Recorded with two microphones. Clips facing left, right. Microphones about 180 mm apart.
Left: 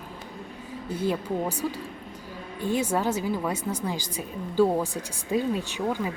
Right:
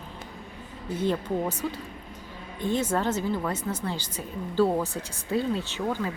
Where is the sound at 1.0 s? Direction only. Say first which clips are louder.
Right 1 dB; 10° left (ahead or behind).